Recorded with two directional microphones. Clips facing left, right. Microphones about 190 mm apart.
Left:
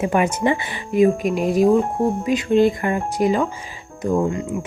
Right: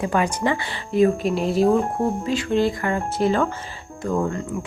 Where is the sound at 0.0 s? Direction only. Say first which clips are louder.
Left 3 dB; 20° left (ahead or behind).